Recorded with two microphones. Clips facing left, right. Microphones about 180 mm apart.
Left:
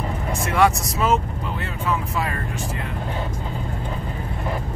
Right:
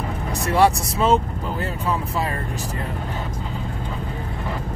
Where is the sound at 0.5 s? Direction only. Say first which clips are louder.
Right 2 dB; 35° right (ahead or behind).